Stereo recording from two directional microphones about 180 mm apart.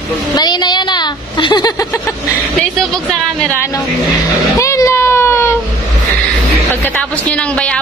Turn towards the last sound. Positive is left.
turn(degrees=5)  # may be behind; listen again after turning